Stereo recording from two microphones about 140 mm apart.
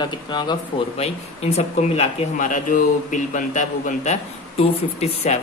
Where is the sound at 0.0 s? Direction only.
30° left (ahead or behind).